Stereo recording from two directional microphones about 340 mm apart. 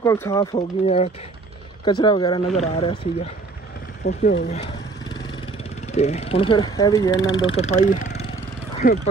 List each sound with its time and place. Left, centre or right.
0.0 s speech: centre
4.0 s speech: left
5.9 s speech: centre